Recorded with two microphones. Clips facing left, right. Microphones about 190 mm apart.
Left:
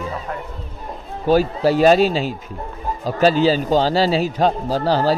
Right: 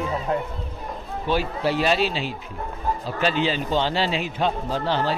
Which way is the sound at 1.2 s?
40° left (ahead or behind).